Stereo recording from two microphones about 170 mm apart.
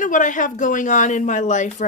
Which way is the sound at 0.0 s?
50° left (ahead or behind).